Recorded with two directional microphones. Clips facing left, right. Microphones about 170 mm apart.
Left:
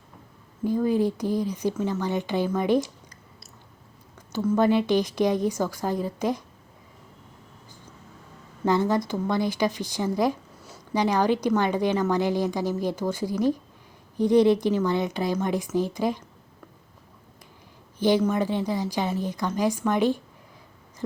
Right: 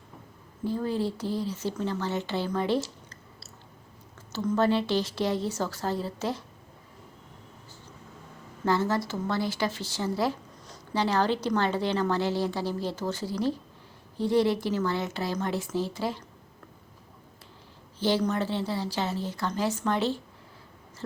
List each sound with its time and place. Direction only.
0.6 s a woman's voice: 15° left (ahead or behind)
4.3 s a woman's voice: 10° left (ahead or behind)
8.6 s a woman's voice: 20° left (ahead or behind)
18.0 s a woman's voice: 15° left (ahead or behind)